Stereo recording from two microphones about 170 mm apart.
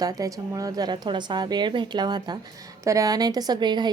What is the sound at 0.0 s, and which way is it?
A woman's voice, 20° right (ahead or behind).